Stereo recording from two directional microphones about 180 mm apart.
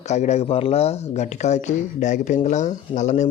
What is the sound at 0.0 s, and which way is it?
Speech, 40° left (ahead or behind).